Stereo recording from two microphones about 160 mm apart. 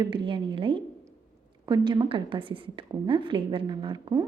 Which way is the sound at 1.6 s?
25° right (ahead or behind).